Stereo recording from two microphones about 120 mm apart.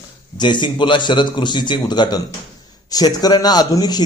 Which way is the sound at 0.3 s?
40° left (ahead or behind).